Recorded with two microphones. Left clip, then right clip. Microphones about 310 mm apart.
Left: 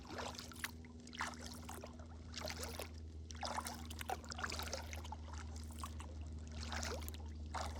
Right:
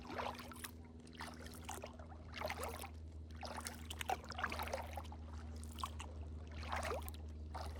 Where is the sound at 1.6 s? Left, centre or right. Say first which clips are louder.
Right 3 dB; right.